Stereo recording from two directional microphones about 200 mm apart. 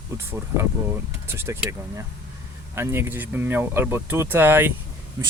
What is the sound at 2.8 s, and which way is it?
Speech, 10° right (ahead or behind).